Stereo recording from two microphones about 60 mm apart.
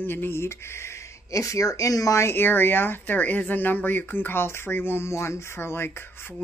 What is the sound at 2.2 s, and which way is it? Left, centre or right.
Speech, left.